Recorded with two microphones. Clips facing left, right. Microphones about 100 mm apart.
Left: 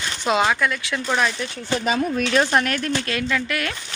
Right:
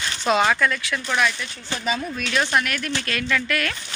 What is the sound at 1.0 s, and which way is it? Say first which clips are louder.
Speech: left 2 dB; 35° left (ahead or behind).